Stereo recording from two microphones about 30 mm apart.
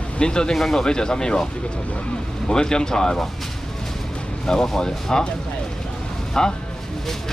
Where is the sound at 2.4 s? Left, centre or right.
Left.